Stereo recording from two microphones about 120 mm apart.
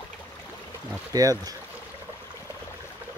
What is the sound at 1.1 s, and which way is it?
Speech, 30° right (ahead or behind).